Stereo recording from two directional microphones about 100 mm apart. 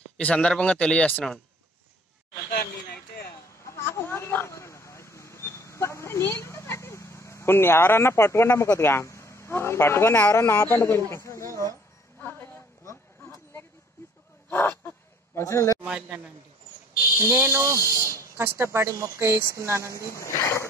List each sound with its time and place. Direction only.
0.2 s speech: 10° left (ahead or behind)
3.6 s a sound: 25° left (ahead or behind)
15.3 s speech: 30° left (ahead or behind)
15.8 s a man's voice: 10° right (ahead or behind)
17.3 s speech: 25° right (ahead or behind)
20.0 s speech: 30° left (ahead or behind)